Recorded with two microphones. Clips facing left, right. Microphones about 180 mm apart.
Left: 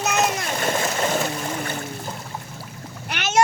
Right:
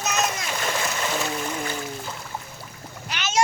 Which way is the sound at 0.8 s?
45° left (ahead or behind).